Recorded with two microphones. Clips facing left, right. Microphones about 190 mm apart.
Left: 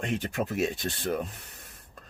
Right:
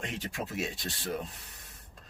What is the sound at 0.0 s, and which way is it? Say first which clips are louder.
Speech: left 7 dB; 55° left (ahead or behind).